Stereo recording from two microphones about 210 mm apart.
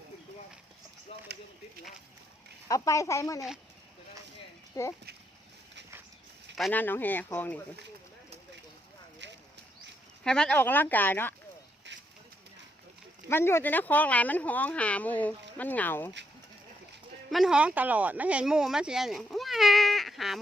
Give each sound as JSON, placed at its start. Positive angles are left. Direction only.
{"t": 2.6, "sound": "speech", "side_deg": 15}
{"t": 4.7, "sound": "speech", "side_deg": 15}
{"t": 6.6, "sound": "speech", "side_deg": 10}
{"t": 9.2, "sound": "a sound", "side_deg": -55}
{"t": 10.2, "sound": "speech", "side_deg": 5}
{"t": 11.9, "sound": "a sound", "side_deg": -55}
{"t": 13.3, "sound": "speech", "side_deg": 10}
{"t": 17.3, "sound": "speech", "side_deg": -5}